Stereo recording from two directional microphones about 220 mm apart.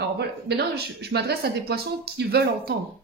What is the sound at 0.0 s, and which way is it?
Speech, 50° right (ahead or behind).